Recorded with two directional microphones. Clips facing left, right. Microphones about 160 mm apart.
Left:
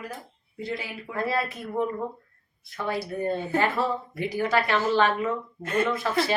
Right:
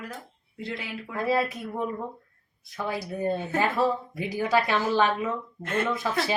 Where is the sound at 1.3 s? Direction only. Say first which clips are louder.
Right 5 dB; 15° right (ahead or behind).